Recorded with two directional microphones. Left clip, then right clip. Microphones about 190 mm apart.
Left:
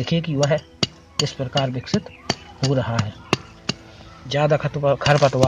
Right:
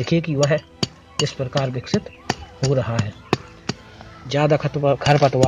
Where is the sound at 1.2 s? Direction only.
15° right (ahead or behind).